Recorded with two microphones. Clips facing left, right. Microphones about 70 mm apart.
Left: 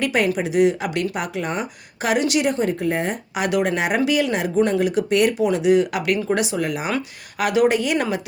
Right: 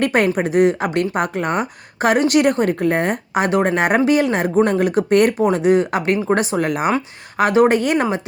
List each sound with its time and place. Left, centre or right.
0.0 s a woman's voice: right
6.9 s a woman's voice: right